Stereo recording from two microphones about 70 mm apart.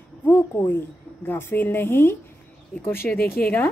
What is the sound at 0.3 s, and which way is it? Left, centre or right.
A woman's voice, left.